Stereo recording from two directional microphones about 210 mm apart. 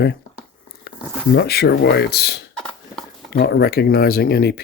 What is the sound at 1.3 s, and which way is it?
Speech, 50° left (ahead or behind).